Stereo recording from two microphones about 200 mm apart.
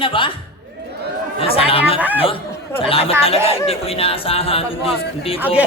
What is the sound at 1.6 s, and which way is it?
Speech, 30° left (ahead or behind).